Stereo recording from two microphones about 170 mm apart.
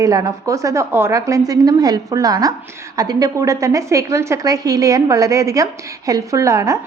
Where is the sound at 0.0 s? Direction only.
20° right (ahead or behind).